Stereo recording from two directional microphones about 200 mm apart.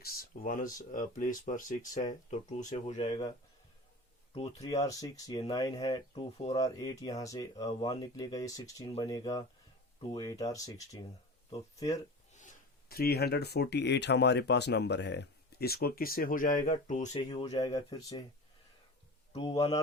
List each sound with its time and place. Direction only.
0.0 s speech: 45° left (ahead or behind); by 3.3 s 25° left (ahead or behind)
4.6 s speech: 15° left (ahead or behind)
12.3 s speech: 40° left (ahead or behind)
17.2 s speech: 20° left (ahead or behind)
19.3 s a man's voice: 30° left (ahead or behind)